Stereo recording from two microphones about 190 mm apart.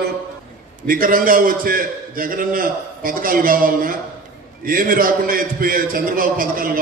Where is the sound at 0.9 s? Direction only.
50° right (ahead or behind).